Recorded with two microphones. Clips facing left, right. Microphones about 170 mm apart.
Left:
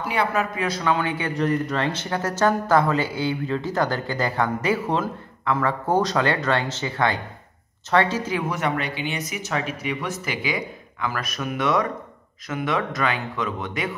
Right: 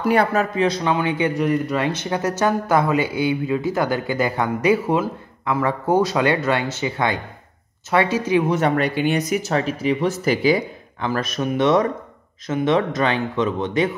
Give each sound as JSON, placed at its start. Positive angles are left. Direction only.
{"t": 0.0, "sound": "speech", "side_deg": -40}
{"t": 0.6, "sound": "speech", "side_deg": -20}
{"t": 8.5, "sound": "speech", "side_deg": -40}